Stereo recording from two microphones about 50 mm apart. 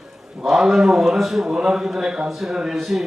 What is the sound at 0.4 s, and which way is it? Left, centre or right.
A man's voice, centre.